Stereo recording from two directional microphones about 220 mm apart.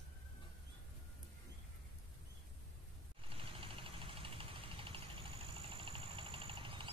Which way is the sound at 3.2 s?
25° right (ahead or behind).